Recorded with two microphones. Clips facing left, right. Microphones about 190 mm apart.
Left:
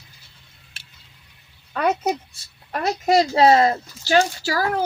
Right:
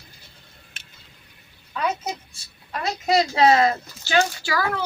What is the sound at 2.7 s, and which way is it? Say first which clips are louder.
Speech: left 3 dB; 50° left (ahead or behind).